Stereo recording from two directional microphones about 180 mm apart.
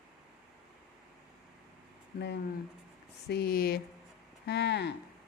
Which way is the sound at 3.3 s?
60° left (ahead or behind).